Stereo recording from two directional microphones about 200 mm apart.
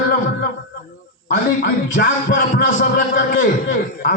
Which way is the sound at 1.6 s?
45° left (ahead or behind).